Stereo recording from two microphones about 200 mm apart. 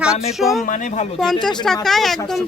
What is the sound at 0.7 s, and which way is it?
Speech, 40° left (ahead or behind).